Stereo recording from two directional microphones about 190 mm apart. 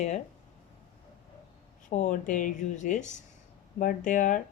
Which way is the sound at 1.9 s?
40° left (ahead or behind).